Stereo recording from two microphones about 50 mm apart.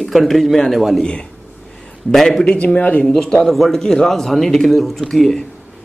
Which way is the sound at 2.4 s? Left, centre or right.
Left.